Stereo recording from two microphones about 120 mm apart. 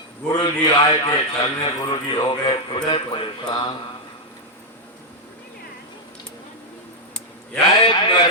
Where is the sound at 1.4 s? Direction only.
35° left (ahead or behind).